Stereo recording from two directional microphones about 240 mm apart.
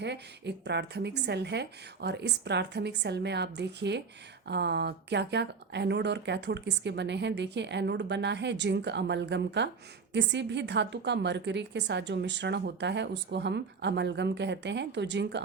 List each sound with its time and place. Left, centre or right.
0.0 s a woman's voice: right